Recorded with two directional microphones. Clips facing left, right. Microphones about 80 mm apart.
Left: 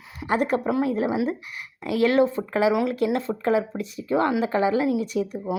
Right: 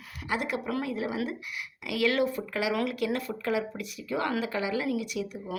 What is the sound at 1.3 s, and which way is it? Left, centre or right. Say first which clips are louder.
Speech: left 6 dB; left.